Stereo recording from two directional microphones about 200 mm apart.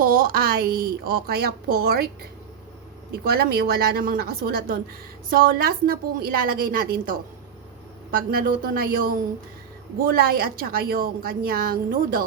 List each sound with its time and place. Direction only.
0.0 s a woman's voice: 45° right (ahead or behind)
3.1 s a woman's voice: 50° right (ahead or behind)